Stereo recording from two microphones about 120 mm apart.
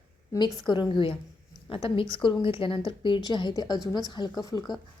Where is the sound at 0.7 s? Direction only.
40° left (ahead or behind).